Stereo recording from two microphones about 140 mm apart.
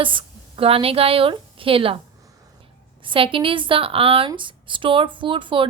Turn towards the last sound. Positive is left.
turn(degrees=-35)  # may be behind; listen again after turning